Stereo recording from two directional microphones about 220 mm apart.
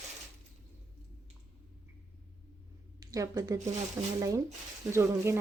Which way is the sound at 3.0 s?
15° right (ahead or behind).